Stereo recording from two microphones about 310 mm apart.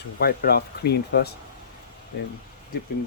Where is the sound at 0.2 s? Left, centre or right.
Left.